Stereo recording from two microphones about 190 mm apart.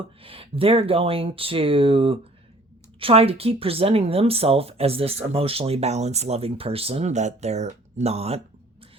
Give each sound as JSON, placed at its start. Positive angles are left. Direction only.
{"t": 0.2, "sound": "speech", "side_deg": -30}